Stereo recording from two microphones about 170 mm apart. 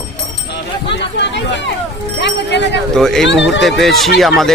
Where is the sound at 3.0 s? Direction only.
Centre (ahead or behind).